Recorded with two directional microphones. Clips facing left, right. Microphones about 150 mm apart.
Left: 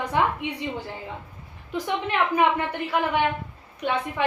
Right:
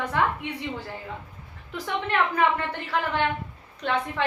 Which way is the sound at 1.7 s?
15° left (ahead or behind).